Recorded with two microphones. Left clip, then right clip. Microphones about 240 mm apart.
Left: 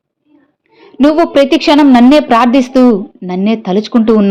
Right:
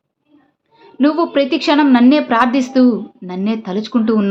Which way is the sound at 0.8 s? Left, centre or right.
Left.